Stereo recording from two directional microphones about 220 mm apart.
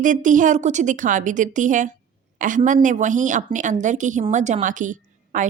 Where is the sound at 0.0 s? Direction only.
35° right (ahead or behind).